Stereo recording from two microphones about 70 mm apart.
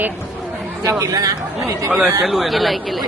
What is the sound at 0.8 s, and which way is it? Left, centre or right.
Speech, right.